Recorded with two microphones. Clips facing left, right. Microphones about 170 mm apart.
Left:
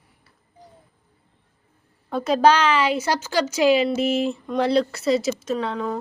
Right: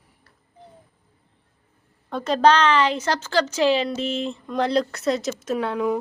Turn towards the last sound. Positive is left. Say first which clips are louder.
# right 2 dB
turn(degrees=-10)  # may be behind; listen again after turning